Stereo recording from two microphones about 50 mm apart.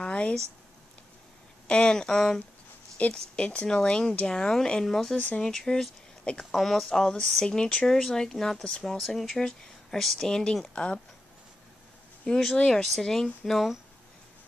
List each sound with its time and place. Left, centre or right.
0.0 s a sound: left
1.7 s speech: centre
3.0 s speech: left; by 5.1 s centre
5.1 s speech: left
5.4 s speech: centre
12.3 s speech: centre
12.5 s speech: centre